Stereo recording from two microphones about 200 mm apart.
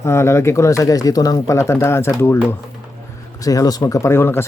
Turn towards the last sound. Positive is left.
turn(degrees=10)  # may be behind; listen again after turning